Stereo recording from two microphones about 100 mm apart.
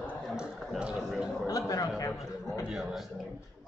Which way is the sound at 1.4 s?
35° left (ahead or behind).